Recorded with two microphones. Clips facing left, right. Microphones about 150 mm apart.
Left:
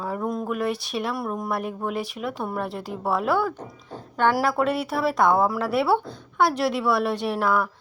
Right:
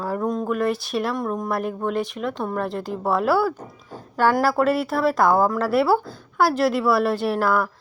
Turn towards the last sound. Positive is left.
turn(degrees=0)  # may be behind; listen again after turning